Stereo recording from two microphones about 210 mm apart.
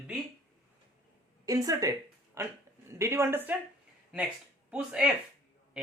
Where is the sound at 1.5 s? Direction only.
15° right (ahead or behind).